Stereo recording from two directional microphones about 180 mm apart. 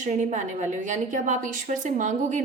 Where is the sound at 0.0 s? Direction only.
40° right (ahead or behind).